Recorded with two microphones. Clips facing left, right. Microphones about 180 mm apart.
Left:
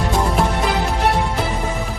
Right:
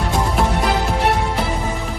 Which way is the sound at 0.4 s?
Centre (ahead or behind).